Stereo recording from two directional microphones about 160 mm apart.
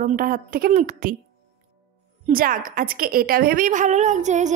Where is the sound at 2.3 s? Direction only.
60° right (ahead or behind).